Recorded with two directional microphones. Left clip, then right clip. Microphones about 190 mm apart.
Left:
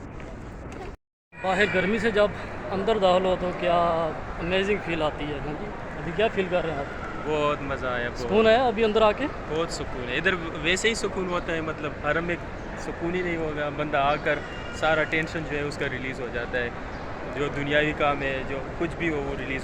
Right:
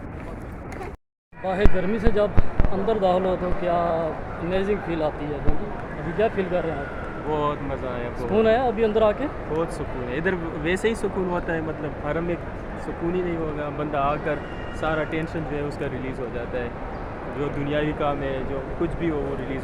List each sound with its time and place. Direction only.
1.5 s speech: centre (ahead or behind)
6.1 s speech: 10° left (ahead or behind)
7.3 s speech: 15° right (ahead or behind)
8.3 s speech: 25° left (ahead or behind)
10.1 s speech: 35° right (ahead or behind)
12.0 s speech: 15° right (ahead or behind)